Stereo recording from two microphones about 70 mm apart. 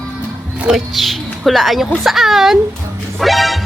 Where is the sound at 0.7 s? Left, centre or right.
Centre.